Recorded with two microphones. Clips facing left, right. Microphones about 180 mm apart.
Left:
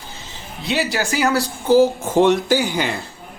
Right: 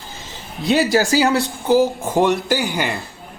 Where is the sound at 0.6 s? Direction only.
35° right (ahead or behind).